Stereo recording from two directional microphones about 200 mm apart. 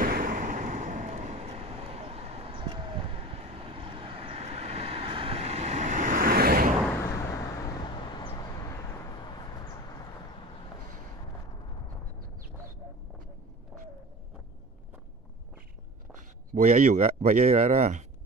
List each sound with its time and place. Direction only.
0.0 s vehicle: 45° right (ahead or behind)
7.0 s vehicle: 15° left (ahead or behind)
16.1 s speech: 40° right (ahead or behind)